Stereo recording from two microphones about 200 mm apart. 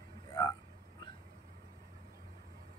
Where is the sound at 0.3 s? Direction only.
20° left (ahead or behind).